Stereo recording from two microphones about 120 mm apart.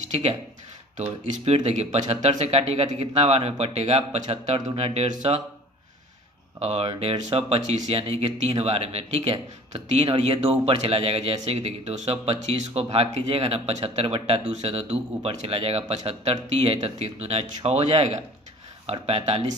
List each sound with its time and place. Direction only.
0.1 s speech: 60° right (ahead or behind)
0.9 s speech: 75° right (ahead or behind)
6.6 s speech: 60° right (ahead or behind)